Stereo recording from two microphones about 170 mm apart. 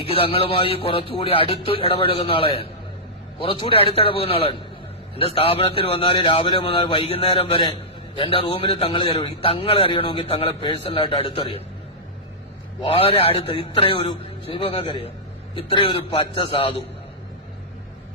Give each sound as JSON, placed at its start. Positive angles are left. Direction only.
{"t": 0.0, "sound": "a man's voice", "side_deg": 35}
{"t": 12.8, "sound": "a man's voice", "side_deg": 35}